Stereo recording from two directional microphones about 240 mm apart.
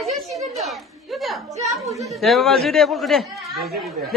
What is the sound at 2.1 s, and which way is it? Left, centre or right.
Speech, centre.